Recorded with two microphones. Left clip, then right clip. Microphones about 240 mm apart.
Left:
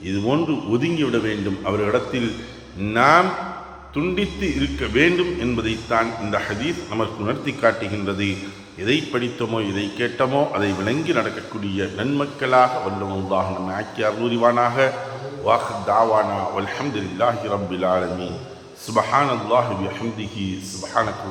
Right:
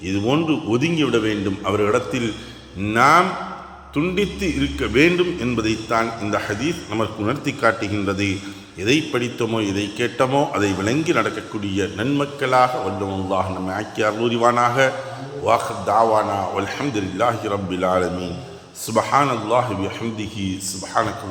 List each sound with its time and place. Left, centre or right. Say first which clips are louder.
0.1 s a man's voice: right 1 dB; centre
20.9 s a man's voice: even; right